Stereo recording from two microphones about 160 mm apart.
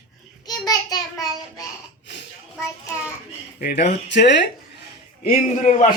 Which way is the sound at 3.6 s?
90° left.